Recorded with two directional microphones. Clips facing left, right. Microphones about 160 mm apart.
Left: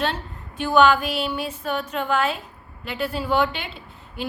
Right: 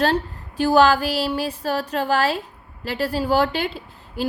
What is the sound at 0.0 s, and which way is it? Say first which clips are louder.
Speech: right 6 dB; 35° right (ahead or behind).